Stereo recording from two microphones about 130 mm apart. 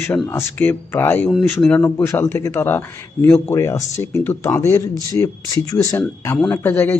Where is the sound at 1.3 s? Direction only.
Centre (ahead or behind).